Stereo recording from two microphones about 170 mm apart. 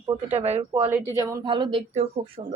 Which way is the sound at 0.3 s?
40° right (ahead or behind).